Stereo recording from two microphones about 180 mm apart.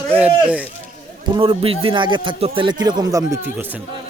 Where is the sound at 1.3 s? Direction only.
30° right (ahead or behind); by 3.8 s 10° right (ahead or behind).